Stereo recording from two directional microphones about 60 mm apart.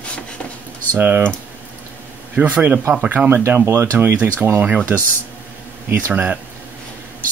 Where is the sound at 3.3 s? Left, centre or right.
Right.